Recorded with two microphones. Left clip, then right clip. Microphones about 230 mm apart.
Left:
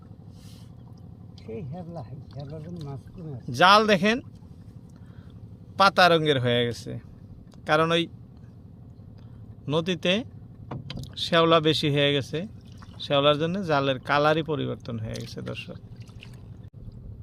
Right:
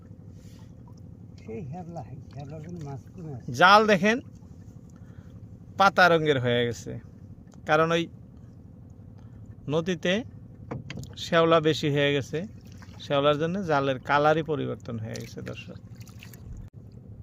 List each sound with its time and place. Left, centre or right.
1.5 s speech: centre
5.7 s speech: centre
9.6 s speech: centre
15.3 s speech: centre